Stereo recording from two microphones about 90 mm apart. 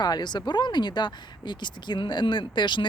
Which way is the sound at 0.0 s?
55° left (ahead or behind).